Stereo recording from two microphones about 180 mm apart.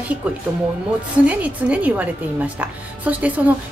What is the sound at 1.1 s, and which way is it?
A woman's voice, 10° right (ahead or behind).